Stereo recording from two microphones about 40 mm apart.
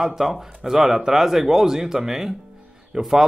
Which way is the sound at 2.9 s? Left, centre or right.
Right.